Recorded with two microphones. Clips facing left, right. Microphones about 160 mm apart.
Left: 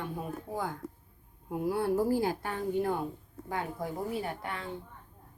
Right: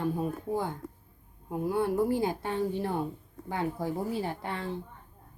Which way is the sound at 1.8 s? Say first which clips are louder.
Even; 20° right (ahead or behind).